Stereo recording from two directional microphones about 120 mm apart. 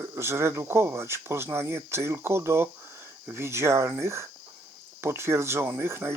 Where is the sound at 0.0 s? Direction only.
20° right (ahead or behind).